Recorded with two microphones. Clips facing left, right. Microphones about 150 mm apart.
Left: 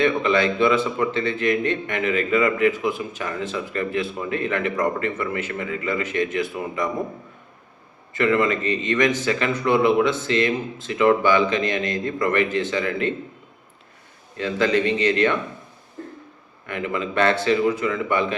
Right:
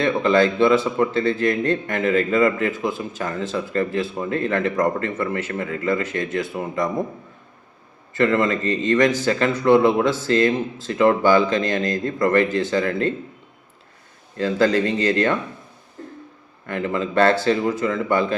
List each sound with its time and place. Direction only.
0.0 s a man's voice: 35° right (ahead or behind)
8.1 s a man's voice: 35° right (ahead or behind)
14.3 s a man's voice: 35° right (ahead or behind)
16.6 s a man's voice: 35° right (ahead or behind)